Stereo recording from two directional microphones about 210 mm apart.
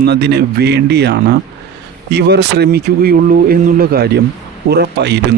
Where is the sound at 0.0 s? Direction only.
55° right (ahead or behind).